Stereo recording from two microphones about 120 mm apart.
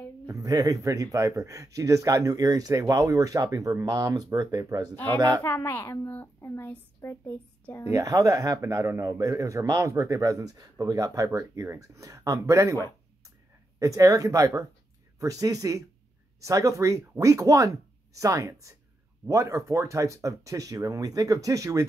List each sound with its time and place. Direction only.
0.3 s speech: 30° right (ahead or behind)
5.4 s a woman's voice: 20° left (ahead or behind)
7.9 s speech: 30° right (ahead or behind)